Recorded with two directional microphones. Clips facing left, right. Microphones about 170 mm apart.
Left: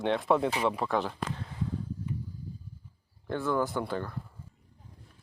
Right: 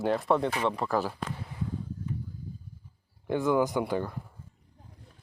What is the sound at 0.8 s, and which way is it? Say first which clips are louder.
Speech: right 1 dB; 5° right (ahead or behind).